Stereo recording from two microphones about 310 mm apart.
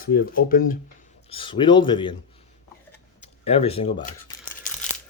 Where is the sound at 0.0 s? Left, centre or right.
Left.